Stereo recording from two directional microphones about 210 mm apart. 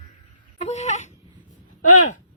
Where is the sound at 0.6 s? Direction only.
35° left (ahead or behind).